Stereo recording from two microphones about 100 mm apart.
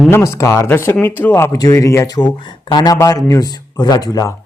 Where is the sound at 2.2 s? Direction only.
50° left (ahead or behind).